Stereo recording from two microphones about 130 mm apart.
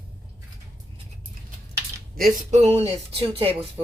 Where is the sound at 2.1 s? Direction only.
75° right (ahead or behind); by 2.9 s 55° right (ahead or behind).